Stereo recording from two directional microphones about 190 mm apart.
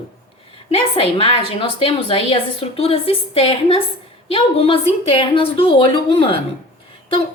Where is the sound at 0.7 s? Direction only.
30° left (ahead or behind).